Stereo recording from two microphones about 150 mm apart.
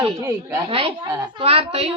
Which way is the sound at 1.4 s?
40° right (ahead or behind).